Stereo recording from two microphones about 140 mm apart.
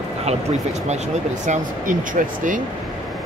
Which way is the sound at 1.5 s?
70° right (ahead or behind).